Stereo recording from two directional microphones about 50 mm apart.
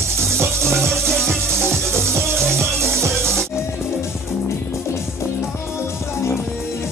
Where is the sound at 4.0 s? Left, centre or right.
Left.